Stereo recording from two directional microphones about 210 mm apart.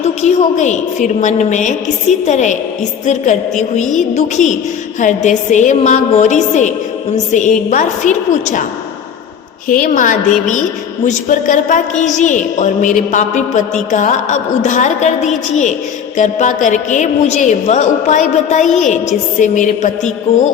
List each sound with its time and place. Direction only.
0.0 s a woman's voice: 35° left (ahead or behind)
4.1 s a woman's voice: 35° left (ahead or behind)
9.6 s a woman's voice: 40° left (ahead or behind)